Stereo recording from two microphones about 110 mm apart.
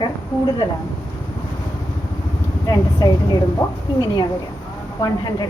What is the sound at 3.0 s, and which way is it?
A woman's voice, 35° left (ahead or behind).